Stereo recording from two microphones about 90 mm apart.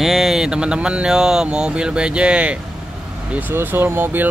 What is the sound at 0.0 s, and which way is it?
Speech, centre (ahead or behind).